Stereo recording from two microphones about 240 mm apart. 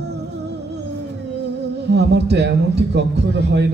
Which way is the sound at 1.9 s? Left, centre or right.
Right.